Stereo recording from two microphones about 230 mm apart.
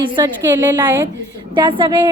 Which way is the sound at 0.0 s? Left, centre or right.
Centre.